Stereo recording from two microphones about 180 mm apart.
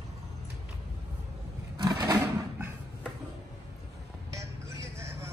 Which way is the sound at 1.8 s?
20° right (ahead or behind).